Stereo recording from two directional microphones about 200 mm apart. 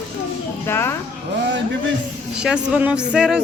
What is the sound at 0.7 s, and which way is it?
Speech, 10° left (ahead or behind).